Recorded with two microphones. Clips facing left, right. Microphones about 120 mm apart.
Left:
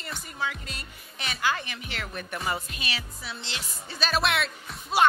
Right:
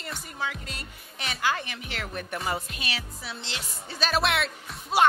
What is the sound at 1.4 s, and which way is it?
Speech, 45° right (ahead or behind).